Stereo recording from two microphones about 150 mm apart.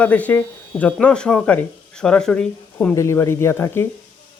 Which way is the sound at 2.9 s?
20° left (ahead or behind).